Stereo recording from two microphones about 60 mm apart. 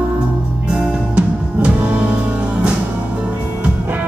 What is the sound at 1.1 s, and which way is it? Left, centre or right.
Music, right.